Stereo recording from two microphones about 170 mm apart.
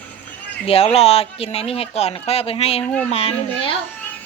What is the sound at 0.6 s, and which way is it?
Speech, 35° left (ahead or behind).